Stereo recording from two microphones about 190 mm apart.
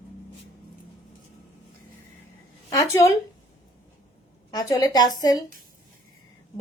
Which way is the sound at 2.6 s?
15° left (ahead or behind).